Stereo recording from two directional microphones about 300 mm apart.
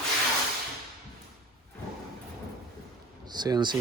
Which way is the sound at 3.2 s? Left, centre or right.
Centre.